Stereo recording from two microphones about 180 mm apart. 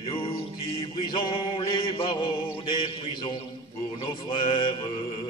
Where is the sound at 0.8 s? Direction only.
30° left (ahead or behind).